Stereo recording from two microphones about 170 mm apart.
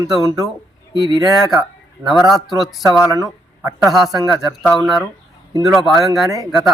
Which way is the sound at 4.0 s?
25° right (ahead or behind).